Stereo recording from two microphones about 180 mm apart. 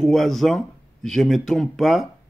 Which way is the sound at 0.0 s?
Centre (ahead or behind).